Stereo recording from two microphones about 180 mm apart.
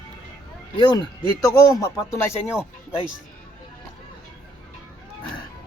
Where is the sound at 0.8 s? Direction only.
25° left (ahead or behind).